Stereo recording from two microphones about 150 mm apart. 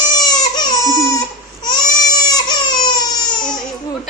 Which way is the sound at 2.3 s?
30° left (ahead or behind).